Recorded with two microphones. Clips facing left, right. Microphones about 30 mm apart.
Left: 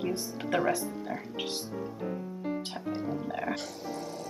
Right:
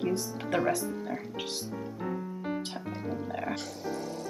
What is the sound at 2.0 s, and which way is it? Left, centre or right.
Music, centre.